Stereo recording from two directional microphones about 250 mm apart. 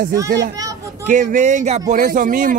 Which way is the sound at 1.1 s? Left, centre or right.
Right.